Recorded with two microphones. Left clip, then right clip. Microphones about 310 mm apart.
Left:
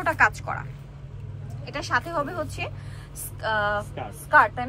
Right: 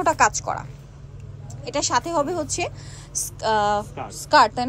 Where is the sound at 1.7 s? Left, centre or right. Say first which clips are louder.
Right 4 dB; centre.